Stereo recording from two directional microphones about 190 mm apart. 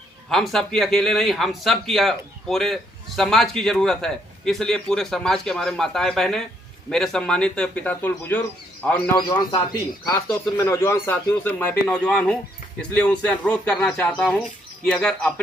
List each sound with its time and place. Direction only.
0.3 s a man's voice: centre (ahead or behind)
9.1 s a man's voice: 20° left (ahead or behind); by 15.3 s 5° left (ahead or behind)